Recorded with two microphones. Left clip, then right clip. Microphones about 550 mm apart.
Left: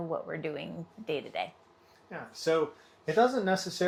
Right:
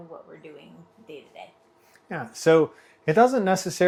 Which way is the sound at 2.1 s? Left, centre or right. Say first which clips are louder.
Right 10 dB; right.